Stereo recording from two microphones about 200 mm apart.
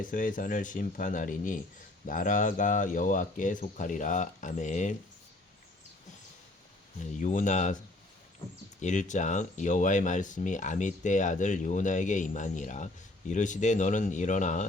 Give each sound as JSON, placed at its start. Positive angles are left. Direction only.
{"t": 0.0, "sound": "speech", "side_deg": 40}
{"t": 7.2, "sound": "speech", "side_deg": 40}
{"t": 8.8, "sound": "speech", "side_deg": 35}